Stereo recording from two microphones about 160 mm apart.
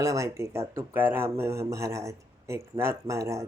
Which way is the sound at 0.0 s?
20° right (ahead or behind).